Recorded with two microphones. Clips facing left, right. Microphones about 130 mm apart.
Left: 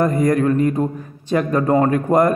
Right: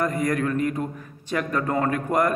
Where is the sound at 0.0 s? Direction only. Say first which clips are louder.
Left 7 dB; 30° left (ahead or behind).